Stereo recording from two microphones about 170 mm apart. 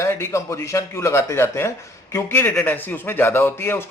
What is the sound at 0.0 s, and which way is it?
A man's voice, 15° left (ahead or behind).